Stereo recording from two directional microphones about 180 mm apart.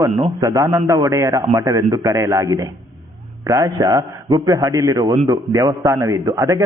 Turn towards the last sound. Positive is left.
turn(degrees=-15)  # may be behind; listen again after turning